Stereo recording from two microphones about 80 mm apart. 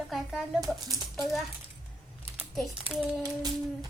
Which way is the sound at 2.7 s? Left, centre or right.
Centre.